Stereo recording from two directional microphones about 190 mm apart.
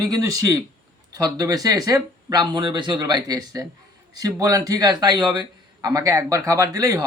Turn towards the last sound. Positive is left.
turn(degrees=-20)  # may be behind; listen again after turning